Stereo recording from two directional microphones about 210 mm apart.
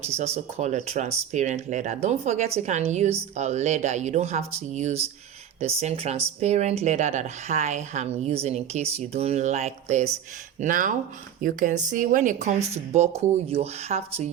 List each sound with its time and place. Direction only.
0.5 s speech: 35° right (ahead or behind)